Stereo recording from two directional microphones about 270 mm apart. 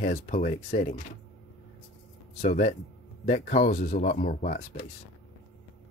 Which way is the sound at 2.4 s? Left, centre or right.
Left.